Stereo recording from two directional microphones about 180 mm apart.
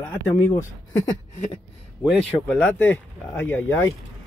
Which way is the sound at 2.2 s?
5° left (ahead or behind).